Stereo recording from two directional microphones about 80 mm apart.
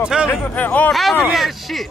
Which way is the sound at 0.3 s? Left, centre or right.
Left.